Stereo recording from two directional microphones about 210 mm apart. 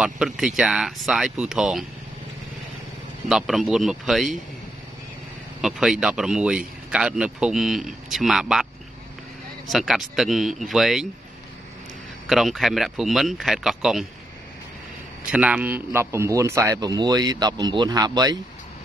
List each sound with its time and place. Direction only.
0.0 s speech: 5° right (ahead or behind)
3.3 s speech: centre (ahead or behind)
5.6 s speech: centre (ahead or behind)
9.7 s speech: centre (ahead or behind)
12.3 s speech: centre (ahead or behind)
15.3 s speech: 5° right (ahead or behind)